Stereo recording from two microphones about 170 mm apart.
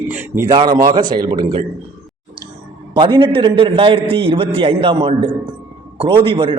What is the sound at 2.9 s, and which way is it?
A man's voice, 30° right (ahead or behind).